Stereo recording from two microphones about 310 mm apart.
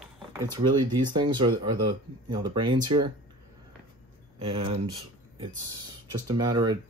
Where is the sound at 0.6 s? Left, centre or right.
Centre.